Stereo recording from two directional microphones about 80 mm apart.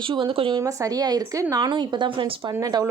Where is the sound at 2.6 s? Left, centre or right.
Right.